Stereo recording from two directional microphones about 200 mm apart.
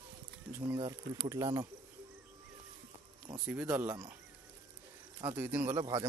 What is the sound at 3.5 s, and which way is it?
Speech, 10° right (ahead or behind).